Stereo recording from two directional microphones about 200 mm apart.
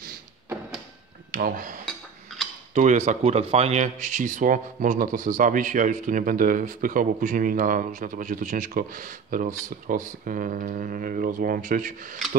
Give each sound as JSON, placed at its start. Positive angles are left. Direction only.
{"t": 1.3, "sound": "speech", "side_deg": -45}